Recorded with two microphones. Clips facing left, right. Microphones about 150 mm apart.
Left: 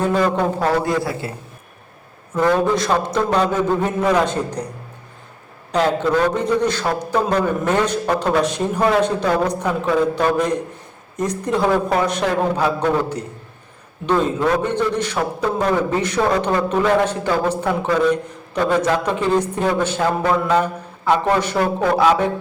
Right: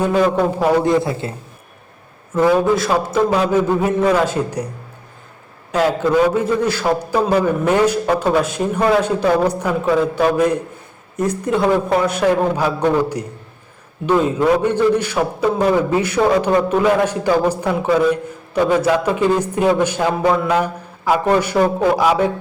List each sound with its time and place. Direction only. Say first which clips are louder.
0.0 s a man's voice: right 2 dB; 10° right (ahead or behind)
0.9 s a man's voice: right 4 dB; 25° right (ahead or behind)
2.3 s a man's voice: right 3 dB; 5° right (ahead or behind)
5.7 s a man's voice: right 2 dB; 5° right (ahead or behind)